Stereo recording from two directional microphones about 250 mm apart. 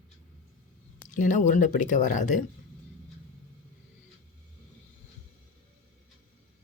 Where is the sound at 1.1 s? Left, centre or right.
Left.